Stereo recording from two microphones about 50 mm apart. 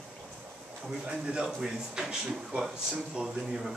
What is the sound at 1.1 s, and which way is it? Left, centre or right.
Speech, centre.